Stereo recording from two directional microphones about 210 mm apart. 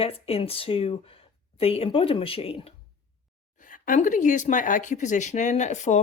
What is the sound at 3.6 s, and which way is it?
Speech, 40° left (ahead or behind).